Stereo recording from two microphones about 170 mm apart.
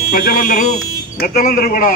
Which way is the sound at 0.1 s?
60° left (ahead or behind).